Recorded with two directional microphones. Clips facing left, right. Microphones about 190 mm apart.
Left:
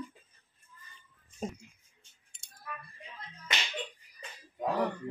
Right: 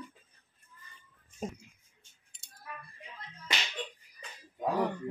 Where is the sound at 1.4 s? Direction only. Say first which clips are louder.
Left 1 dB; 5° right (ahead or behind).